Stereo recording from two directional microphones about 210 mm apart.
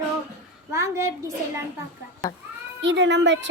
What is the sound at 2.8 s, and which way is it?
Speech, 55° right (ahead or behind).